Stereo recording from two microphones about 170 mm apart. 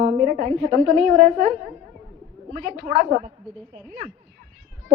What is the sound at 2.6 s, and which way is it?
Speech, 55° right (ahead or behind).